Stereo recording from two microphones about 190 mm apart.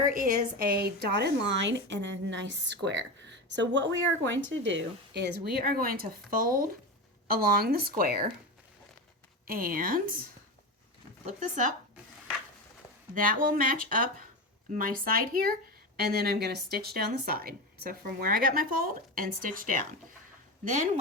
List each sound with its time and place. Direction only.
0.1 s a woman's voice: 45° right (ahead or behind)
9.5 s speech: 50° right (ahead or behind)
11.3 s speech: 40° right (ahead or behind)
13.1 s a woman's voice: 45° right (ahead or behind)